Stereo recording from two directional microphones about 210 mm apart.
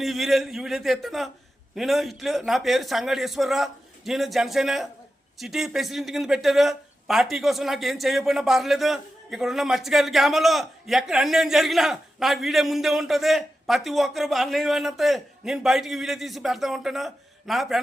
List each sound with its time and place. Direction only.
0.0 s speech: centre (ahead or behind)